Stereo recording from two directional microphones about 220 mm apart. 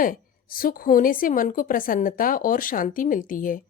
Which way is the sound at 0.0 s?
40° left (ahead or behind).